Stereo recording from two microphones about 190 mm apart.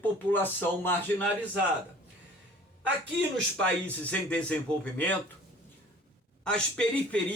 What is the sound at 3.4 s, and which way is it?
Speech, 5° left (ahead or behind).